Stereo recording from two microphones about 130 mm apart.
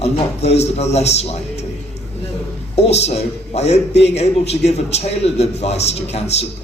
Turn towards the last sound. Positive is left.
turn(degrees=55)  # may be behind; listen again after turning